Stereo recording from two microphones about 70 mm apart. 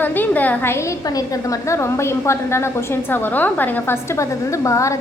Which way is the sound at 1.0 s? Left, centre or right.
Left.